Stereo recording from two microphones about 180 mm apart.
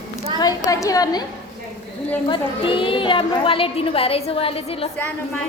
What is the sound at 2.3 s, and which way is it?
A woman's voice, 30° left (ahead or behind).